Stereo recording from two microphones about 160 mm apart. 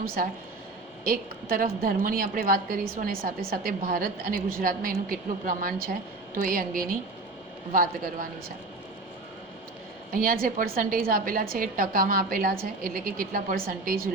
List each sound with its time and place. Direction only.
0.0 s a woman's voice: 65° right (ahead or behind)
10.1 s a woman's voice: 60° right (ahead or behind)